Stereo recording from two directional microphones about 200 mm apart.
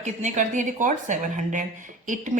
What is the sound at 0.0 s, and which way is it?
Speech, 35° right (ahead or behind).